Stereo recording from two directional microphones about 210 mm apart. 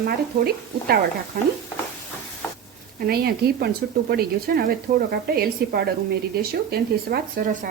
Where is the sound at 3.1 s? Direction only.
50° right (ahead or behind).